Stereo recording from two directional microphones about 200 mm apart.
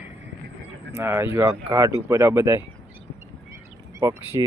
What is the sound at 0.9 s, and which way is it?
Speech, 10° right (ahead or behind).